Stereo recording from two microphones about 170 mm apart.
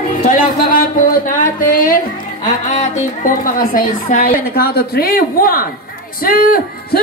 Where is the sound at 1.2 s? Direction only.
55° left (ahead or behind).